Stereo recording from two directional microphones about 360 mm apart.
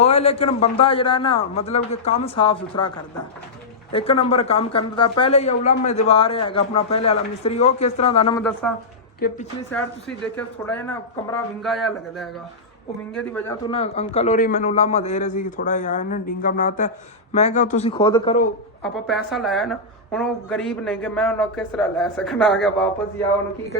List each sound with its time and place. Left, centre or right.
0.0 s a woman's voice: centre
3.9 s a woman's voice: centre
9.2 s a man's voice: left
10.3 s a man's voice: centre
18.8 s a man's voice: centre